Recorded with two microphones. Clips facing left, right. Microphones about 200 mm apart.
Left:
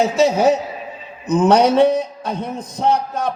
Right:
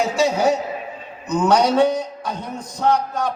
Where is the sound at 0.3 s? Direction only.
20° left (ahead or behind).